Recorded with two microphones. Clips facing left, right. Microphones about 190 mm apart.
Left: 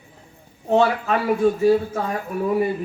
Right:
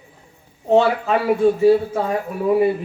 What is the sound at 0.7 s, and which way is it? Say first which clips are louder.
Speech: right 3 dB; 30° right (ahead or behind).